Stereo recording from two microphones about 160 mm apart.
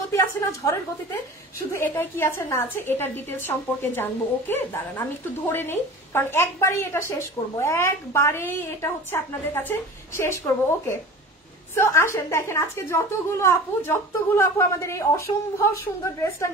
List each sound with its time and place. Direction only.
0.1 s a woman's voice: 15° left (ahead or behind)